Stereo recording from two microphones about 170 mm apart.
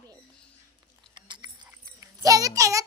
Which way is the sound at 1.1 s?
25° right (ahead or behind).